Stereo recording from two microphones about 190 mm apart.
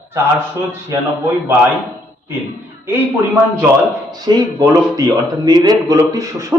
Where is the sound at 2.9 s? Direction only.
10° right (ahead or behind).